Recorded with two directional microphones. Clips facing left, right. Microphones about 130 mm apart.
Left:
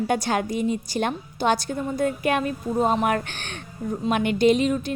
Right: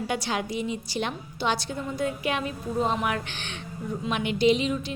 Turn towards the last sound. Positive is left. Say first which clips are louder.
# left 3 dB
turn(degrees=50)  # may be behind; listen again after turning